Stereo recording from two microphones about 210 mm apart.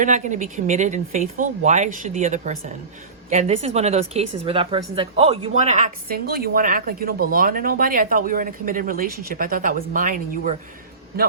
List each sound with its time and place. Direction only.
0.0 s a woman's voice: 35° right (ahead or behind)